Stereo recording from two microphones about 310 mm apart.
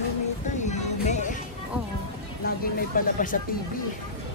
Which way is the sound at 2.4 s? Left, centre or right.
Left.